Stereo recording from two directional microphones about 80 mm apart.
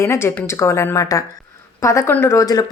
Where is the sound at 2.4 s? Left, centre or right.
Left.